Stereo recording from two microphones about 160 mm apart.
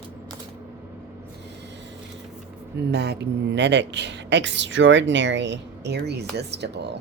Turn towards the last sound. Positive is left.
turn(degrees=-90)